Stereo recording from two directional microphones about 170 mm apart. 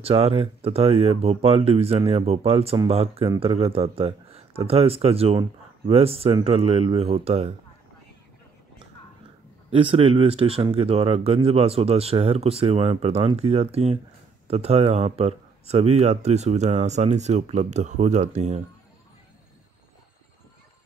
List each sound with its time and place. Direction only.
0.0 s speech: 35° right (ahead or behind)
9.7 s speech: 30° right (ahead or behind)